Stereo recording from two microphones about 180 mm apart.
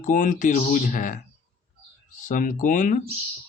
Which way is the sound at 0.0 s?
45° left (ahead or behind).